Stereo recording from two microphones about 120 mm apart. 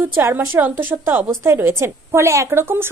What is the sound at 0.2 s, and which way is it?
A woman's voice, 20° right (ahead or behind).